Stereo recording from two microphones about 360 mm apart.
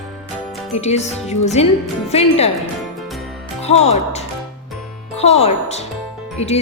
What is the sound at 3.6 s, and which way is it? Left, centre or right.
Speech, centre.